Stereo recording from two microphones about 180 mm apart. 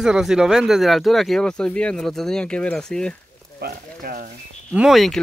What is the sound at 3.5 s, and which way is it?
Speech, 55° right (ahead or behind).